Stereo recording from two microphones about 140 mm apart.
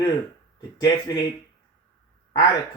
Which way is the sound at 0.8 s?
25° left (ahead or behind).